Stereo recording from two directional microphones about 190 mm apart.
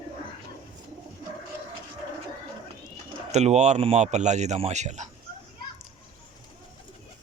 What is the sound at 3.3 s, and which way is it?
Speech, 35° right (ahead or behind).